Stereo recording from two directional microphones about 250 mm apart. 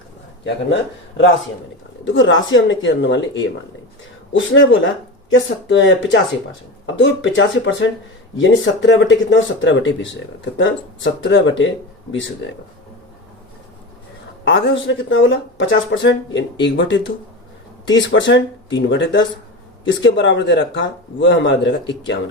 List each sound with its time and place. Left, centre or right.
0.4 s speech: left
4.3 s speech: left
14.5 s speech: left